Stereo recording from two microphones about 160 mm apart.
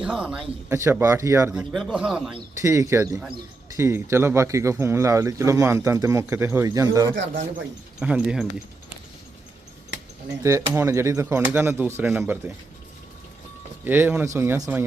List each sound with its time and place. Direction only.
0.0 s speech: 5° right (ahead or behind)
0.7 s speech: 15° right (ahead or behind)
1.5 s speech: centre (ahead or behind)
2.6 s a man's voice: 20° right (ahead or behind)
7.9 s speech: 5° right (ahead or behind)
10.4 s speech: 15° right (ahead or behind)
13.8 s speech: 10° right (ahead or behind)